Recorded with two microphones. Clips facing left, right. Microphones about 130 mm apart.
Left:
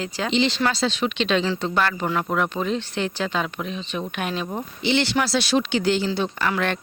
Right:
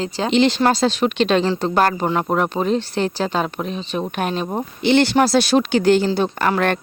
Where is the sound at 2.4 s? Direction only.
40° right (ahead or behind).